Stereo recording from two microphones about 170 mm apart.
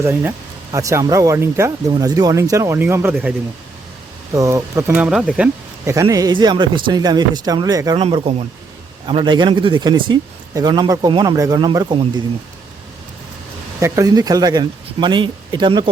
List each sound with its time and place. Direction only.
0.0 s speech: 10° right (ahead or behind)
4.4 s speech: 20° right (ahead or behind)
4.9 s speech: 5° right (ahead or behind)
5.8 s a man's voice: 20° right (ahead or behind)
8.0 s a man's voice: 35° right (ahead or behind)
13.7 s a man's voice: 20° right (ahead or behind)